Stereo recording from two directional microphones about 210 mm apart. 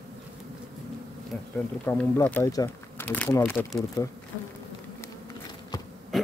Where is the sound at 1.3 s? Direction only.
5° left (ahead or behind).